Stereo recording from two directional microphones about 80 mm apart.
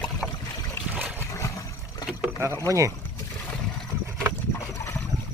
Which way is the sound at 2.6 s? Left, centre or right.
Right.